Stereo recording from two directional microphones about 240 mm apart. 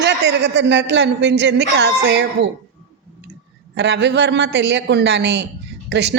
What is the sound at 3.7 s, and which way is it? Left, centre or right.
A woman's voice, right.